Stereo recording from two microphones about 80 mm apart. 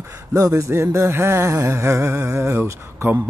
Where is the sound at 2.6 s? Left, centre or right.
Right.